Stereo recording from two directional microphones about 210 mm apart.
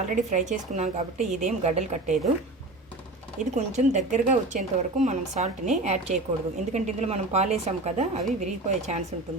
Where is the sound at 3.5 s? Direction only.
35° right (ahead or behind).